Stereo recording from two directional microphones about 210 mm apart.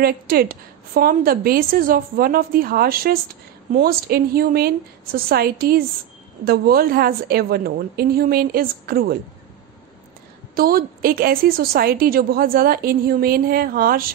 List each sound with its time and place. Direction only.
0.0 s a woman's voice: 45° right (ahead or behind)
10.5 s a woman's voice: 45° right (ahead or behind)